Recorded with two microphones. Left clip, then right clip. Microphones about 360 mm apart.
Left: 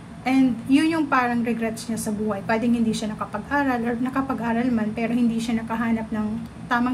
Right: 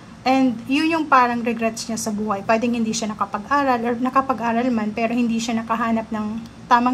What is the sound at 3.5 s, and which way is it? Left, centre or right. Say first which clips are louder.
A woman's voice: right 4 dB; centre.